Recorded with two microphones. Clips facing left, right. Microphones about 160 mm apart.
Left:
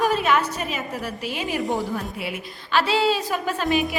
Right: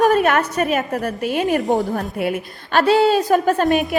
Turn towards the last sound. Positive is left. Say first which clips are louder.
# right 7 dB
turn(degrees=-50)  # may be behind; listen again after turning